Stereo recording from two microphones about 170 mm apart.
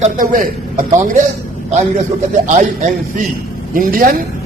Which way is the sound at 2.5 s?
50° right (ahead or behind).